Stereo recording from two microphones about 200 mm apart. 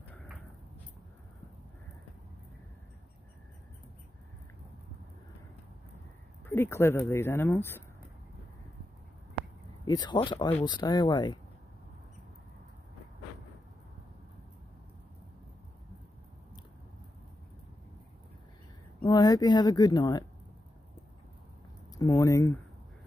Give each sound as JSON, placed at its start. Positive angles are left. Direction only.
{"t": 6.4, "sound": "speech", "side_deg": 10}
{"t": 9.8, "sound": "speech", "side_deg": 20}
{"t": 18.9, "sound": "a woman's voice", "side_deg": 20}
{"t": 21.9, "sound": "speech", "side_deg": 15}